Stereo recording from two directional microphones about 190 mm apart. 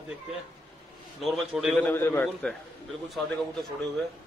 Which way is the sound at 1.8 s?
10° left (ahead or behind).